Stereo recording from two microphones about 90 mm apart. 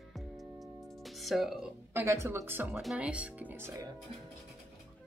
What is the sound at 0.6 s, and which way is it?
Music, centre (ahead or behind).